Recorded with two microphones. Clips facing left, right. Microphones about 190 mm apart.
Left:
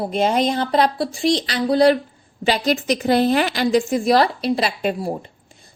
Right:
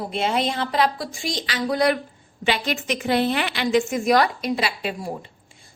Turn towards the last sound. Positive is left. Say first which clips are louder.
# left 5 dB
turn(degrees=35)  # may be behind; listen again after turning